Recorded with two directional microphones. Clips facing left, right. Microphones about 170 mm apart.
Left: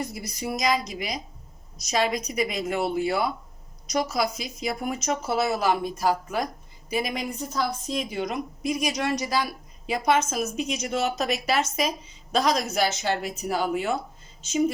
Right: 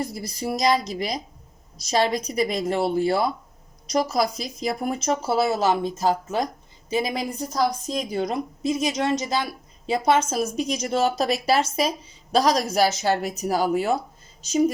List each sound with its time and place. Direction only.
0.0 s a woman's voice: 30° right (ahead or behind)